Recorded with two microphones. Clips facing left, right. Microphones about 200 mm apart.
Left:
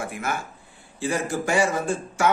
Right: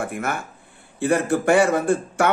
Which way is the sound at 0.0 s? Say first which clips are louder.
Right 3 dB; 55° right (ahead or behind).